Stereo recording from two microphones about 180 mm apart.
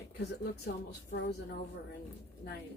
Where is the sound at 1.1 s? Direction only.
65° left (ahead or behind).